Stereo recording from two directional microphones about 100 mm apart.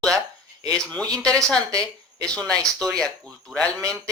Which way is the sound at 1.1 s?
10° left (ahead or behind).